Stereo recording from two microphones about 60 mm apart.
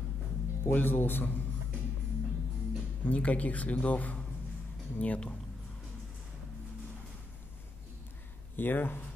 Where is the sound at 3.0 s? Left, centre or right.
Left.